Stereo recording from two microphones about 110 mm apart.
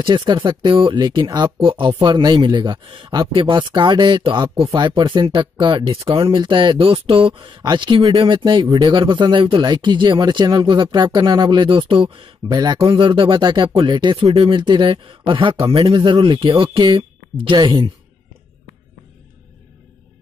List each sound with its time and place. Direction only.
0.0 s speech: 50° right (ahead or behind)